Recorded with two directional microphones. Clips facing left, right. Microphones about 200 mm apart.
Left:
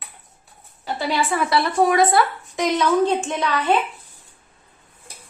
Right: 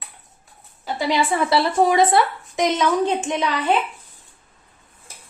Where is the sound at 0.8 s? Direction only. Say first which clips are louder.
Right 2 dB; 20° right (ahead or behind).